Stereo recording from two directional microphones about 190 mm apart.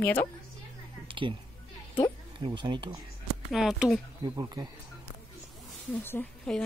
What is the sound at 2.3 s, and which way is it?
Speech, 25° right (ahead or behind).